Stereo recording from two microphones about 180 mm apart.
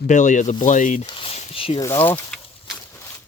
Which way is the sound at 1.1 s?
30° left (ahead or behind).